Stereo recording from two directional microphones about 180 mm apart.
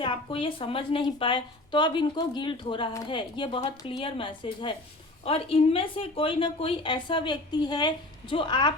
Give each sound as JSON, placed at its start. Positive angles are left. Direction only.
{"t": 0.0, "sound": "a woman's voice", "side_deg": 30}